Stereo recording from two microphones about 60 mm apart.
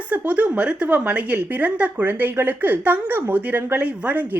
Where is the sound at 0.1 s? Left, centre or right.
Right.